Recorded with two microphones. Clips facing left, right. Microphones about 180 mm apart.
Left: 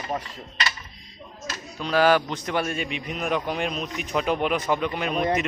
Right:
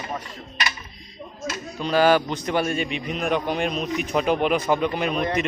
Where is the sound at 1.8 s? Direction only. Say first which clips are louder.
Right 2 dB; centre (ahead or behind).